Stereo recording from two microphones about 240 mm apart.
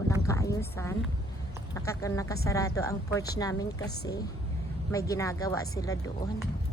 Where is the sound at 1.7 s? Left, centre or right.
Centre.